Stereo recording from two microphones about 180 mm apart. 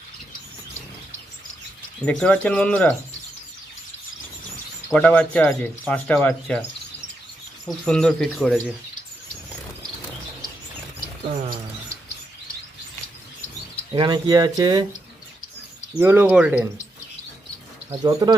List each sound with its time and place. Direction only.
2.0 s speech: 5° left (ahead or behind)
4.9 s speech: 5° left (ahead or behind)
11.3 s bird: 40° right (ahead or behind)
13.9 s speech: 25° right (ahead or behind)
16.0 s speech: 10° right (ahead or behind)
18.0 s speech: 25° right (ahead or behind)